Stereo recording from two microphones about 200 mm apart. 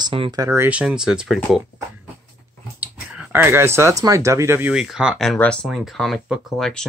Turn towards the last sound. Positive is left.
turn(degrees=0)  # may be behind; listen again after turning